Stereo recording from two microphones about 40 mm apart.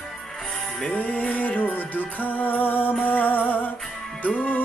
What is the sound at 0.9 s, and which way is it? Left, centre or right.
Music, left.